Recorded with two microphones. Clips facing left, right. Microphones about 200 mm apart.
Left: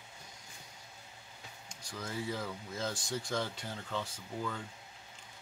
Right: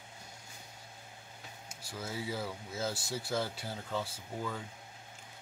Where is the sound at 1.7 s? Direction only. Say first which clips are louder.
Even; 5° right (ahead or behind).